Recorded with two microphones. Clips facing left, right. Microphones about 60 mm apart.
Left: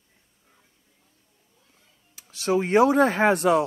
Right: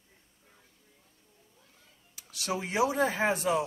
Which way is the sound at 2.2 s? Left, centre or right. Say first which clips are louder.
Left 10 dB; left.